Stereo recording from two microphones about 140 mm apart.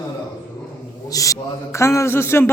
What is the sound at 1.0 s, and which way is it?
A man's voice, 25° left (ahead or behind).